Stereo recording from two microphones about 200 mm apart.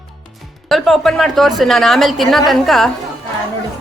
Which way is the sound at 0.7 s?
Centre (ahead or behind).